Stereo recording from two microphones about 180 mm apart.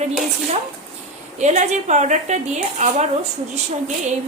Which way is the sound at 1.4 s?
40° right (ahead or behind).